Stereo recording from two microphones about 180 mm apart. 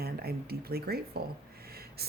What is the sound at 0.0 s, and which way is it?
Speech, 60° right (ahead or behind).